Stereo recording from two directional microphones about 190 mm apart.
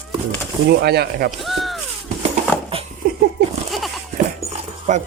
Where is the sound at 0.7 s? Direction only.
60° right (ahead or behind).